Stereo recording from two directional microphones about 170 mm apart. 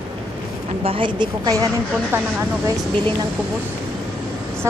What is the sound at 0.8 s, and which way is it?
Speech, 30° right (ahead or behind).